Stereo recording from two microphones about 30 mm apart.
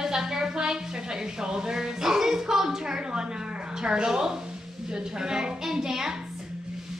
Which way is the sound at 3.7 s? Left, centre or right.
Right.